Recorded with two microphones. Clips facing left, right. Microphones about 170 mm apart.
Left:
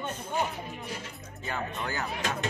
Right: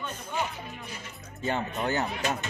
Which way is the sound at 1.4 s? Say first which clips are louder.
Right 5 dB; 25° right (ahead or behind).